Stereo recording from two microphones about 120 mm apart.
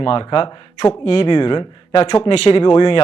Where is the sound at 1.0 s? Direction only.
55° left (ahead or behind).